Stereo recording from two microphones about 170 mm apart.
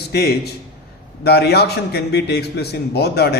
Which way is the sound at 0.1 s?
70° left (ahead or behind).